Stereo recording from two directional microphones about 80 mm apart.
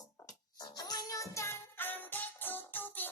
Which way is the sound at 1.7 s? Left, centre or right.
Left.